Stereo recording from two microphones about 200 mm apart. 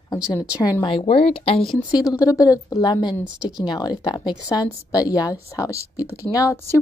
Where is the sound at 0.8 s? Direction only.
30° left (ahead or behind).